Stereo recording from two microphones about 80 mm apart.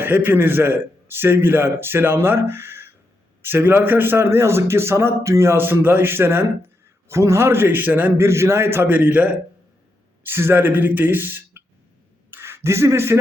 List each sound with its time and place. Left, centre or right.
0.0 s a man's voice: right
8.3 s a man's voice: right
12.3 s a sound: right